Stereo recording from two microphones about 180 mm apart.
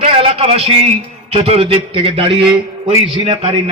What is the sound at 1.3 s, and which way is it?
Speech, 35° right (ahead or behind).